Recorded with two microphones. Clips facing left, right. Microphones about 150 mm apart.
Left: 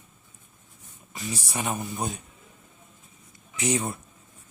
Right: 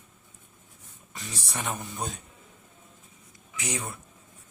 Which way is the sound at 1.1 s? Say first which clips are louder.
Left 5 dB; 10° left (ahead or behind).